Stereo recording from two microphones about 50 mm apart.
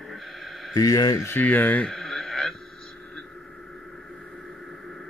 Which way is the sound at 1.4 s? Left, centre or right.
Left.